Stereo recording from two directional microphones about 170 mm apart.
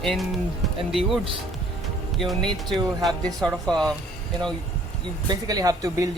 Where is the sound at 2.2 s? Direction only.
Centre (ahead or behind).